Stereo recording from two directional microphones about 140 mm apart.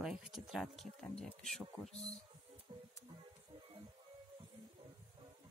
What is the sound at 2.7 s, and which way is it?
Music, 35° right (ahead or behind).